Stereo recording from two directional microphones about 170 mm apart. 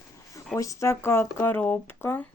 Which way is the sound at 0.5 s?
20° left (ahead or behind).